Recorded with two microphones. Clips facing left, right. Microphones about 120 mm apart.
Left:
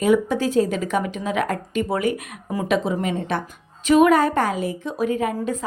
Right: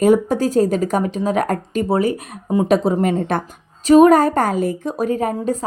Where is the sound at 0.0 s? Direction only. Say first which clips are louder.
Right 4 dB; 45° right (ahead or behind).